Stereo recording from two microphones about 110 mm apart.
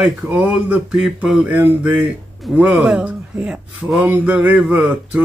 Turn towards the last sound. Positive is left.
turn(degrees=-10)  # may be behind; listen again after turning